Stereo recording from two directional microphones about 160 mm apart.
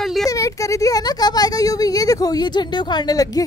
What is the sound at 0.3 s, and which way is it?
Speech, 20° left (ahead or behind).